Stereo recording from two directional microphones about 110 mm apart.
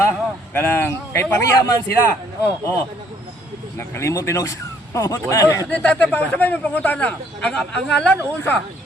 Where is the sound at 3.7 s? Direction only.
25° left (ahead or behind).